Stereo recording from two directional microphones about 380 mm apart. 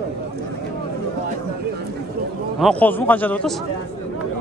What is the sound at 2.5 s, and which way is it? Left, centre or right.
Speech, centre.